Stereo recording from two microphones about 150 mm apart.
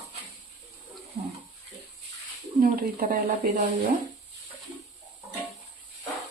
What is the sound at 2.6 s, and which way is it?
Speech, 70° right (ahead or behind).